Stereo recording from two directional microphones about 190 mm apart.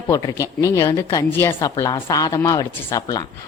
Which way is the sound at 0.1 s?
15° left (ahead or behind).